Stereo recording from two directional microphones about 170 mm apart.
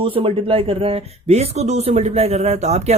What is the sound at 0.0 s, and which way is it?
Speech, 30° right (ahead or behind).